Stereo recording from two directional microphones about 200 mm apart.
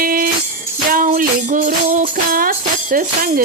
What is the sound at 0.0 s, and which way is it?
Music, 45° right (ahead or behind).